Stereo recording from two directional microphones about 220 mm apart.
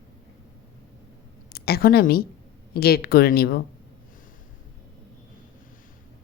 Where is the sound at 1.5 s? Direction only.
45° left (ahead or behind).